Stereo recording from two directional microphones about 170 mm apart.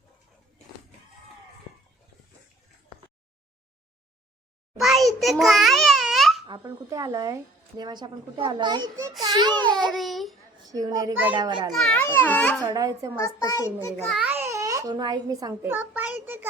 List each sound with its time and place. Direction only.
4.8 s babbling: centre (ahead or behind)
6.4 s a child's voice: 20° right (ahead or behind)
9.9 s a child's voice: centre (ahead or behind)
10.6 s a child's voice: 20° right (ahead or behind)
11.7 s a child's voice: 5° left (ahead or behind)
12.6 s a child's voice: 20° right (ahead or behind)
13.1 s a child's voice: 20° left (ahead or behind)
14.1 s a child's voice: 10° right (ahead or behind)